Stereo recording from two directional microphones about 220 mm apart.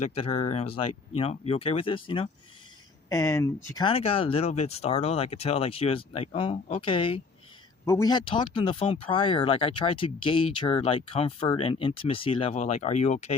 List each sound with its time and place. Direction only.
0.0 s speech: 25° left (ahead or behind)